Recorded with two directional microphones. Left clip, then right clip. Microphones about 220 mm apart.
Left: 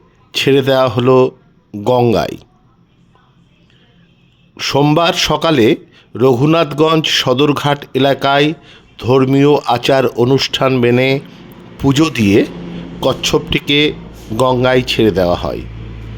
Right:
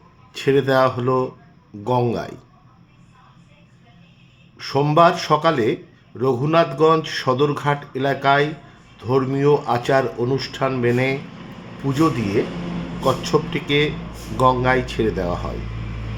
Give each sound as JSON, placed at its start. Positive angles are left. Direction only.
{"t": 0.3, "sound": "a man's voice", "side_deg": 45}
{"t": 4.5, "sound": "a man's voice", "side_deg": 45}